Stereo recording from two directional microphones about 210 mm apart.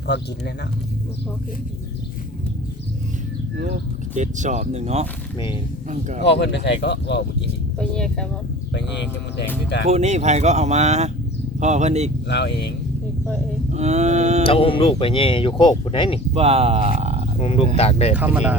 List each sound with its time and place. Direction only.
0.1 s speech: 55° left (ahead or behind)
3.6 s speech: 35° right (ahead or behind)
6.2 s speech: 55° left (ahead or behind)
7.8 s speech: 5° left (ahead or behind)
8.7 s speech: 55° left (ahead or behind)
9.9 s speech: 30° right (ahead or behind)
12.3 s speech: 55° left (ahead or behind)
13.7 s speech: 30° right (ahead or behind)
14.4 s speech: 25° left (ahead or behind)
16.3 s speech: 30° right (ahead or behind)
17.4 s speech: 30° left (ahead or behind)
18.1 s speech: 5° right (ahead or behind)